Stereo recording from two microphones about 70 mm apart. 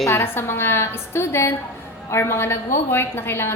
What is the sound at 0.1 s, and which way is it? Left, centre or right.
A woman's voice, left.